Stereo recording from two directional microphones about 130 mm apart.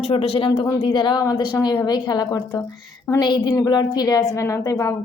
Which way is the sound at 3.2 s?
35° left (ahead or behind).